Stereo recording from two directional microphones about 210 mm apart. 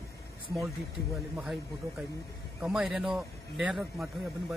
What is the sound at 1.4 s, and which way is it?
A man's voice, 5° right (ahead or behind).